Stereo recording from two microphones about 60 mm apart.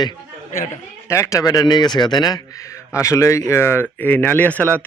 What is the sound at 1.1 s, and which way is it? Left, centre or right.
A man's voice, left.